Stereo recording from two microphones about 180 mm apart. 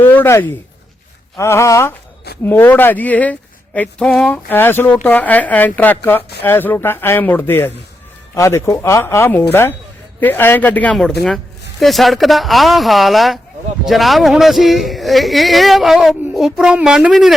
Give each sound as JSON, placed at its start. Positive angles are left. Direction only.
{"t": 0.0, "sound": "speech", "side_deg": 10}